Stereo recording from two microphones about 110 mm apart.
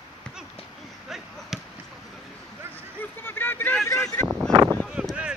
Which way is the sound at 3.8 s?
30° left (ahead or behind).